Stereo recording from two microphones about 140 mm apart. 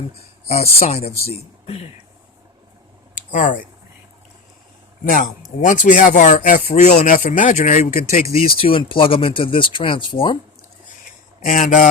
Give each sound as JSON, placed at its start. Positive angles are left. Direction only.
{"t": 0.4, "sound": "speech", "side_deg": 50}
{"t": 3.2, "sound": "a sound", "side_deg": 70}
{"t": 5.0, "sound": "a man's voice", "side_deg": 80}
{"t": 5.6, "sound": "speech", "side_deg": 65}
{"t": 8.6, "sound": "speech", "side_deg": 40}
{"t": 11.4, "sound": "speech", "side_deg": 65}